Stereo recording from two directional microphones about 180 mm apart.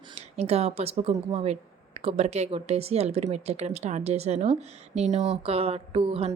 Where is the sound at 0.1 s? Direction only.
35° right (ahead or behind).